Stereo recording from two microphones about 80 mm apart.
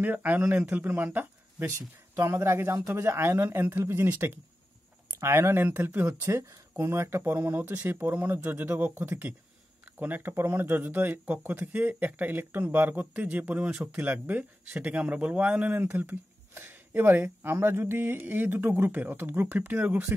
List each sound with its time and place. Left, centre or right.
0.0 s speech: right